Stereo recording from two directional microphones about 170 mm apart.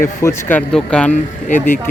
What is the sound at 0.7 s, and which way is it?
Speech, 5° left (ahead or behind).